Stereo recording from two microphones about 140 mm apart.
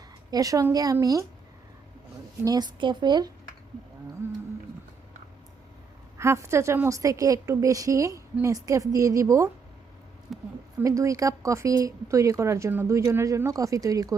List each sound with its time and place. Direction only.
0.3 s a woman's voice: 25° right (ahead or behind)
2.4 s a woman's voice: 30° right (ahead or behind)
6.1 s a woman's voice: 20° right (ahead or behind)
10.3 s a sound: centre (ahead or behind)
10.8 s a woman's voice: 20° right (ahead or behind)